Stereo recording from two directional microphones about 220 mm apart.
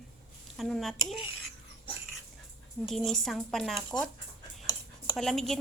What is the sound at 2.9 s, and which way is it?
Speech, centre (ahead or behind).